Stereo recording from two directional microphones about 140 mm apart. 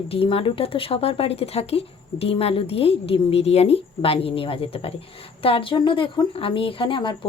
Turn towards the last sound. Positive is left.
turn(degrees=35)  # may be behind; listen again after turning